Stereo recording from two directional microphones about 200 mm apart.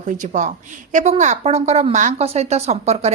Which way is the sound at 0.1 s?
40° right (ahead or behind).